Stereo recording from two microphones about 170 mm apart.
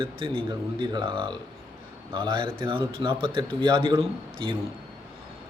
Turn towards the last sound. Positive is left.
turn(degrees=-30)  # may be behind; listen again after turning